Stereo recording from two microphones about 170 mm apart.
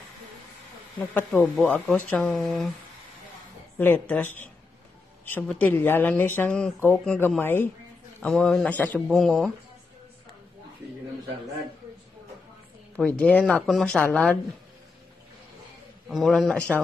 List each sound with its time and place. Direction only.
1.1 s speech: 10° left (ahead or behind)
3.7 s speech: 10° left (ahead or behind)
12.9 s speech: 5° left (ahead or behind)
16.1 s speech: centre (ahead or behind)